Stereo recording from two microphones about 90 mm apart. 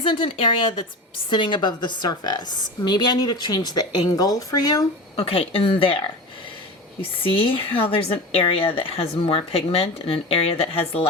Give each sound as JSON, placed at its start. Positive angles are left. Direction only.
{"t": 0.0, "sound": "a woman's voice", "side_deg": 75}
{"t": 5.1, "sound": "speech", "side_deg": 90}
{"t": 7.0, "sound": "speech", "side_deg": 90}